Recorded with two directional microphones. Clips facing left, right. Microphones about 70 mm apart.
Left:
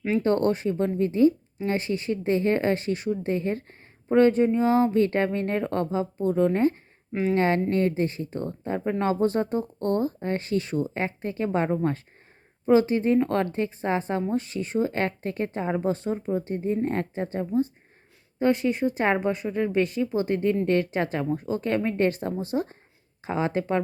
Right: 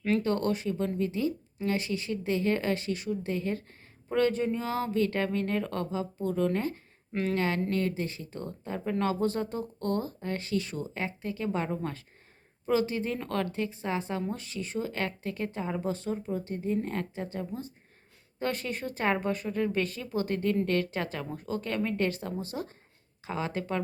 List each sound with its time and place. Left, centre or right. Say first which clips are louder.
0.2 s speech: left 6 dB; left
7.1 s speech: left 5 dB; centre
7.3 s speech: left 7 dB; left
18.3 s speech: left 10 dB; left